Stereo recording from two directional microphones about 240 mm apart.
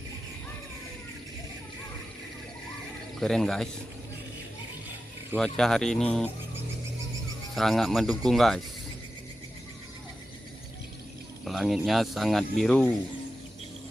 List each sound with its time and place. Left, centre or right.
3.2 s speech: centre
5.4 s speech: centre
7.5 s speech: centre
11.4 s speech: centre